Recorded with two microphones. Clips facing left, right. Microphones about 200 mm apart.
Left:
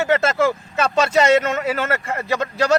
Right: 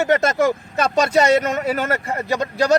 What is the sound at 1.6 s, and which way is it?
Speech, 40° right (ahead or behind).